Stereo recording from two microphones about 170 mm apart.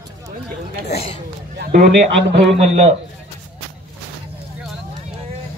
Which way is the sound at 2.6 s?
40° right (ahead or behind).